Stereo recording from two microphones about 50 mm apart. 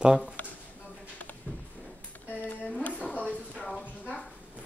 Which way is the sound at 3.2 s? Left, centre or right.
Right.